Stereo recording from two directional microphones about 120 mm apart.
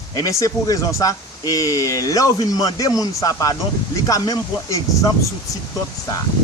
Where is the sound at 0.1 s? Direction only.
30° left (ahead or behind).